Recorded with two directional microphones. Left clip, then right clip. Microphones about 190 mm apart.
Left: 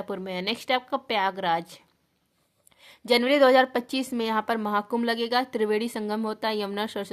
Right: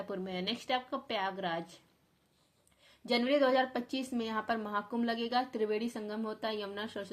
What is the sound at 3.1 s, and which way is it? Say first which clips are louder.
A woman's voice: left 10 dB; 35° left (ahead or behind).